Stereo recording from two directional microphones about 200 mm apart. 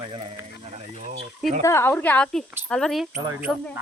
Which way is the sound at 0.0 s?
20° right (ahead or behind).